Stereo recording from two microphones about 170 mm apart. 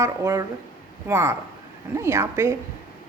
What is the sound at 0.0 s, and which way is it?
A woman's voice, 20° right (ahead or behind).